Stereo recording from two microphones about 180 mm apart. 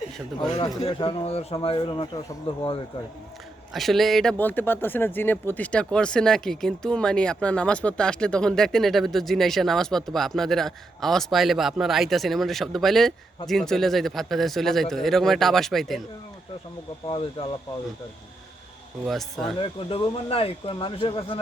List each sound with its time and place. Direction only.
0.6 s speech: 30° left (ahead or behind)
3.7 s speech: centre (ahead or behind)
19.0 s speech: centre (ahead or behind)
19.5 s speech: 30° left (ahead or behind)